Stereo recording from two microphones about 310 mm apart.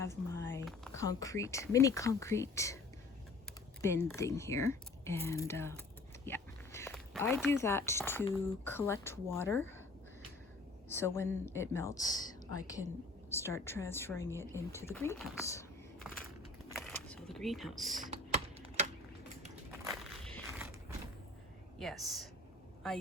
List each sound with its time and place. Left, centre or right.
0.0 s speech: centre
3.8 s speech: centre
10.8 s speech: centre
16.7 s a sound: centre
18.1 s typing: right
19.9 s walk: centre
21.8 s speech: centre